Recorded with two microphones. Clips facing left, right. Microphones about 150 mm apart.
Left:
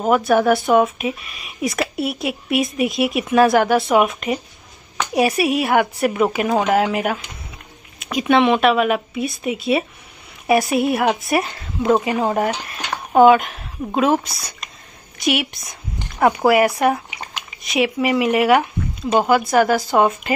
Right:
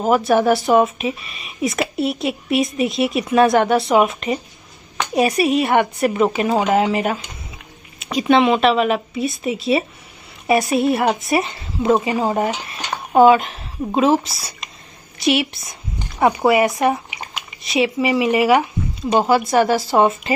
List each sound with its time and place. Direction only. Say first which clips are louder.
0.0 s speech: even; centre (ahead or behind)